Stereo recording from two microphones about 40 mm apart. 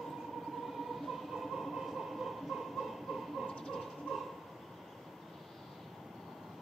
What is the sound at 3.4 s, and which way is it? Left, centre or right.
Dog, centre.